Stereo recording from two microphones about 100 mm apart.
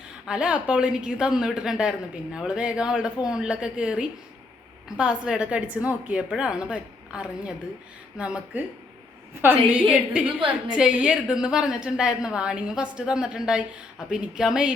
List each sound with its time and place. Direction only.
0.3 s a woman's voice: 10° right (ahead or behind)